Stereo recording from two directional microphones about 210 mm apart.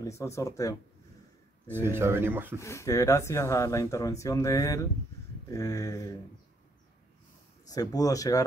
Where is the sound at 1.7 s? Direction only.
10° right (ahead or behind).